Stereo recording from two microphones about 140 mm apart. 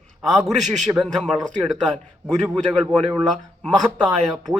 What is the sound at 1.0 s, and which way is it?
Speech, 10° left (ahead or behind).